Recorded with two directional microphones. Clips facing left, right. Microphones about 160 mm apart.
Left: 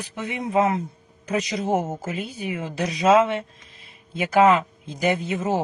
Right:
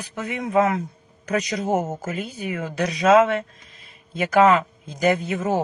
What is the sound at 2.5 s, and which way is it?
Speech, 25° left (ahead or behind).